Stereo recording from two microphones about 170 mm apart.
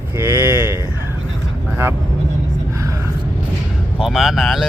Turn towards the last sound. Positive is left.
turn(degrees=0)  # may be behind; listen again after turning